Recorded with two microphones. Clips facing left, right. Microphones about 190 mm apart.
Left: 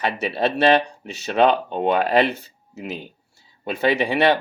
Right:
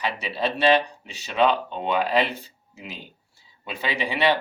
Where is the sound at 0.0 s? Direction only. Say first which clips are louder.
Left 5 dB; 60° left (ahead or behind).